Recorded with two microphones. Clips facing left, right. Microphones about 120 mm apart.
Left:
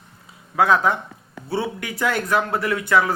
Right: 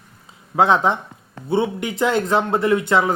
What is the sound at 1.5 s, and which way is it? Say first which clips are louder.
Speech: right 5 dB; 20° right (ahead or behind).